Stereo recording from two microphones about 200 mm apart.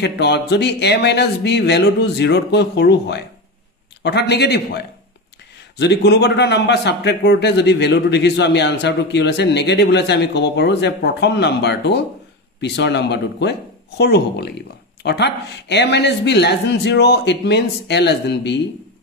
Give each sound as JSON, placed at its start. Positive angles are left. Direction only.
{"t": 0.0, "sound": "a man's voice", "side_deg": 55}